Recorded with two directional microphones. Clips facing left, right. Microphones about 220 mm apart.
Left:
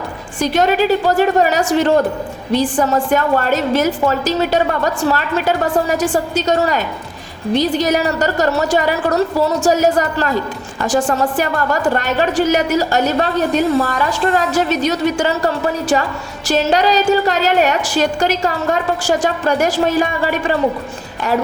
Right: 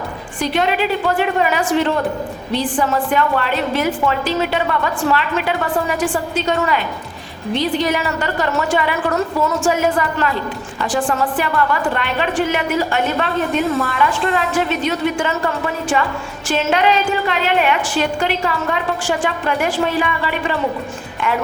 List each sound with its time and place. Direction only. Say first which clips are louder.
0.3 s a woman's voice: left 4 dB; 40° left (ahead or behind)